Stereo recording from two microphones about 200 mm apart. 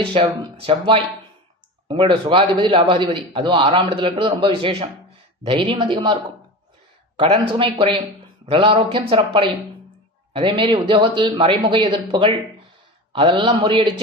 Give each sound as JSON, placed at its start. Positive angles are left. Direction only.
{"t": 0.0, "sound": "a man's voice", "side_deg": -25}
{"t": 7.4, "sound": "a man's voice", "side_deg": -25}